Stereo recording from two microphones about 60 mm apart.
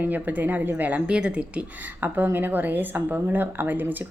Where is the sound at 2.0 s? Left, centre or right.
Right.